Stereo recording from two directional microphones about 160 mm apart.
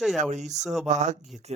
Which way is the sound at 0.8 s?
45° right (ahead or behind).